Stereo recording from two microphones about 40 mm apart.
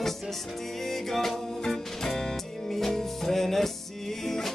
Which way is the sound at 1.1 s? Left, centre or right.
Centre.